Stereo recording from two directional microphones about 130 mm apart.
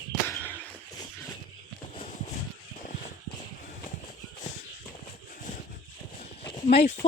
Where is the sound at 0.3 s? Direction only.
15° left (ahead or behind).